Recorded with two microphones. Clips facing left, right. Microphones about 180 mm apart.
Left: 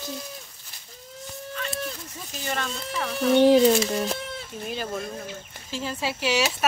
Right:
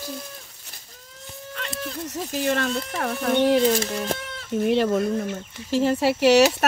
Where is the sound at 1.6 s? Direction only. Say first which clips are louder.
Right 2 dB; 70° right (ahead or behind).